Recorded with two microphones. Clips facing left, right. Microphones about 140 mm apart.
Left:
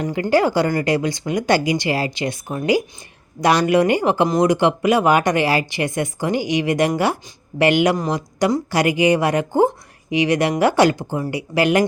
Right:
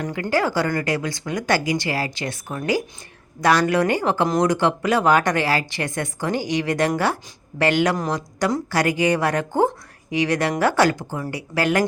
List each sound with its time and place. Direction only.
0.0 s a woman's voice: 25° left (ahead or behind)